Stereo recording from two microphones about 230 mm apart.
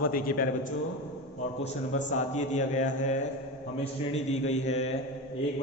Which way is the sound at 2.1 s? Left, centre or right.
Left.